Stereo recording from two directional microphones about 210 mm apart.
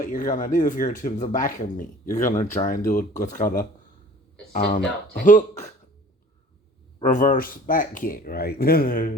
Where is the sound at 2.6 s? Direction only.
20° left (ahead or behind).